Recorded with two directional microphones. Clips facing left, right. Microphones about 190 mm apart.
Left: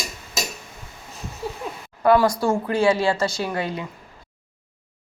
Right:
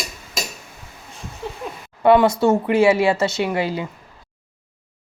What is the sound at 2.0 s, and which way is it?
Speech, 25° right (ahead or behind).